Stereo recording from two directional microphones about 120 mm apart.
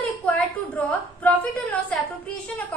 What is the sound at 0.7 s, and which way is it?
A woman's voice, 10° left (ahead or behind).